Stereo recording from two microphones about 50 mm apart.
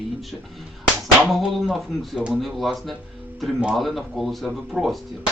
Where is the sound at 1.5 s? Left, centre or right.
Centre.